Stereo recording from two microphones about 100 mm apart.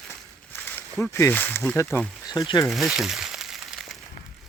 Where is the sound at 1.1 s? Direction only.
20° left (ahead or behind).